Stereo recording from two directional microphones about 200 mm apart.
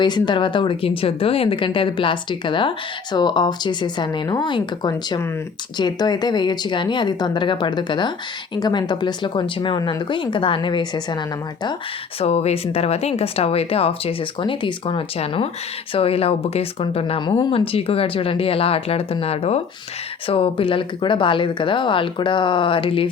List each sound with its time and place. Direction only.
0.0 s speech: 25° left (ahead or behind)
12.2 s speech: 30° left (ahead or behind)